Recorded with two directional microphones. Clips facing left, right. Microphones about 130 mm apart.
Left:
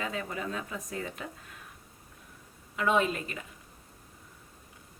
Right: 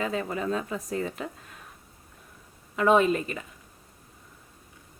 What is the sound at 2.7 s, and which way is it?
Speech, 45° right (ahead or behind).